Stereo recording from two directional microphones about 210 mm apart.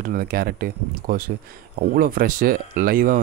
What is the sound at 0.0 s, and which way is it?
Speech, 45° right (ahead or behind).